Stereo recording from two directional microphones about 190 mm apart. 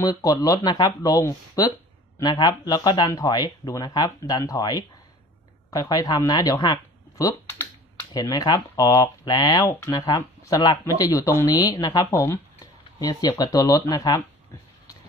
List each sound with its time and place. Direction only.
0.0 s speech: 20° left (ahead or behind)
13.4 s speech: 20° left (ahead or behind)